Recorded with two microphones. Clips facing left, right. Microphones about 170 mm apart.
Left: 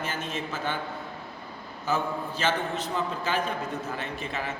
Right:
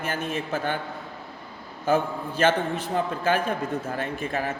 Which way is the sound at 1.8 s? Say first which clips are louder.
Right 5 dB; 55° right (ahead or behind).